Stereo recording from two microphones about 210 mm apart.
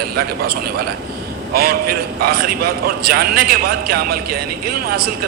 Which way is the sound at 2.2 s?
45° right (ahead or behind).